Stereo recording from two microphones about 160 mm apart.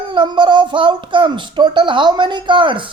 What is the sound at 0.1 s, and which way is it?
Speech, 30° right (ahead or behind).